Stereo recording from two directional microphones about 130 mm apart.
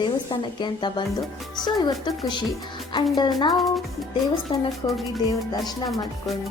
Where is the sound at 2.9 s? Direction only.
35° left (ahead or behind).